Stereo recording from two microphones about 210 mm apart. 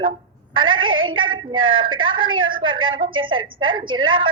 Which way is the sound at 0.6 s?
70° right (ahead or behind).